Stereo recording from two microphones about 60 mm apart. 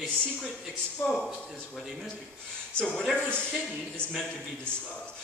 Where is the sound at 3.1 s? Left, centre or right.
Left.